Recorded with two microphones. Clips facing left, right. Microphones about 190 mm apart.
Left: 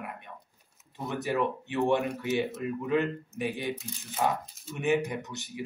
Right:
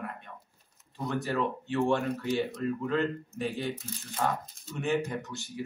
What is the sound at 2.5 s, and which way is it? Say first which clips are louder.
Speech: right 2 dB; 5° left (ahead or behind).